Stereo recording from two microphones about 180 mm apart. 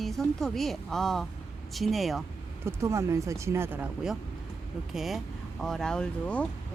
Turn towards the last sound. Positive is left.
turn(degrees=5)  # may be behind; listen again after turning